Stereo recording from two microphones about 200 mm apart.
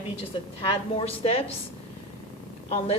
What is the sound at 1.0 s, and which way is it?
Speech, 30° left (ahead or behind).